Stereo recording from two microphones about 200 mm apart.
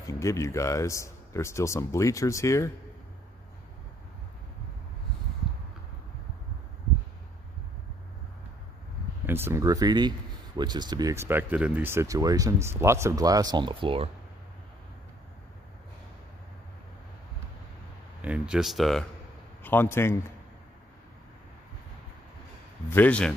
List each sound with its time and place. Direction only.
0.2 s speech: 15° left (ahead or behind)
9.2 s speech: 10° right (ahead or behind); by 14.1 s 30° right (ahead or behind)
18.2 s speech: 5° right (ahead or behind)
19.6 s speech: 10° left (ahead or behind)
22.8 s speech: 10° left (ahead or behind)